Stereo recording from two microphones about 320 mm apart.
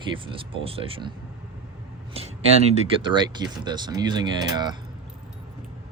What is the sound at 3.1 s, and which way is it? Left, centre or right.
Speech, centre.